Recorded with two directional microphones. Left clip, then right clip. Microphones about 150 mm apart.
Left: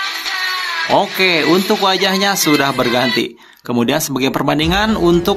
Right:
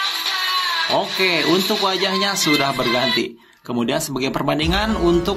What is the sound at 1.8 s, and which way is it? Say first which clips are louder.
Speech: left 5 dB; 35° left (ahead or behind).